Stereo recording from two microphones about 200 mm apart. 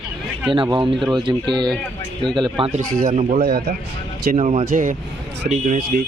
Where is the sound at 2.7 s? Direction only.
35° right (ahead or behind).